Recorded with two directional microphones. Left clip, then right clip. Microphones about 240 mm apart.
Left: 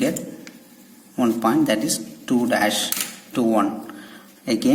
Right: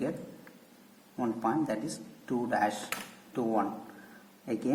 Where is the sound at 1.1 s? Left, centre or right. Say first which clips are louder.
Left 11 dB; left.